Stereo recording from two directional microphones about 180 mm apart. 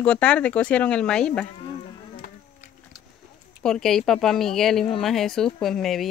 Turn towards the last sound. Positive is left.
turn(degrees=0)  # may be behind; listen again after turning